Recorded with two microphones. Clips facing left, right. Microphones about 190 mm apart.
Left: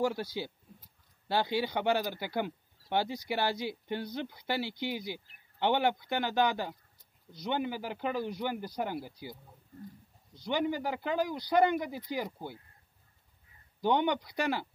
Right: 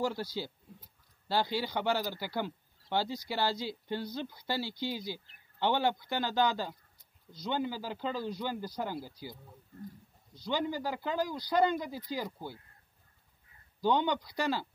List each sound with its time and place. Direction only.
0.0 s speech: 15° left (ahead or behind)
13.7 s speech: 20° left (ahead or behind)